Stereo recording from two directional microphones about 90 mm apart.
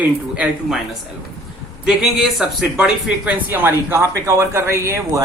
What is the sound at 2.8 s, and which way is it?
Speech, 20° right (ahead or behind).